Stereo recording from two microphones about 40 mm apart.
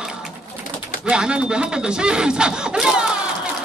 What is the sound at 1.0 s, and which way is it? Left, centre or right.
Speech, right.